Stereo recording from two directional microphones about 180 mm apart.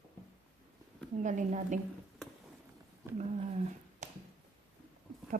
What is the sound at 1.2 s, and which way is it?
Speech, 45° right (ahead or behind).